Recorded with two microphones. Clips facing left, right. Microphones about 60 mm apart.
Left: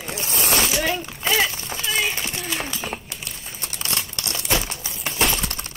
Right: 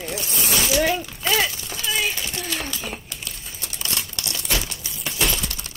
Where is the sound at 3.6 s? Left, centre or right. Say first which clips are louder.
Left 1 dB; left.